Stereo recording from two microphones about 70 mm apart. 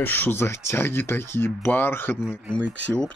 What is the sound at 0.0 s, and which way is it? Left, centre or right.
Speech, left.